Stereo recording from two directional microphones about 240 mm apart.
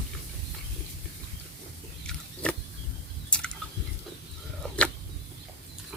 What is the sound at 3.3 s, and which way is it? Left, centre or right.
Chewing, centre.